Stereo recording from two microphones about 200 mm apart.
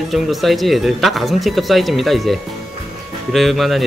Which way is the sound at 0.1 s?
Centre (ahead or behind).